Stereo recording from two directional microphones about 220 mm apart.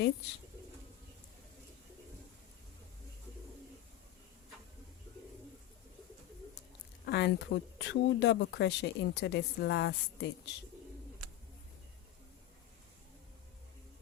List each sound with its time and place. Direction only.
7.0 s speech: 45° left (ahead or behind)